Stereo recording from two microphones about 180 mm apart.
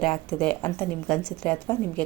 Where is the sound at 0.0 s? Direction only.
5° left (ahead or behind).